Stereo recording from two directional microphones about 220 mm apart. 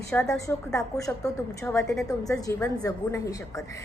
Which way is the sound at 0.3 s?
15° left (ahead or behind).